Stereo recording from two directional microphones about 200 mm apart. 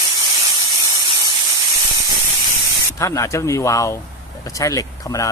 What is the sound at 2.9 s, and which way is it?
Speech, 15° left (ahead or behind).